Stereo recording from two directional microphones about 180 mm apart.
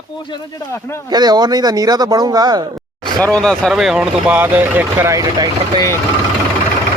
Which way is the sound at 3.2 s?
5° left (ahead or behind).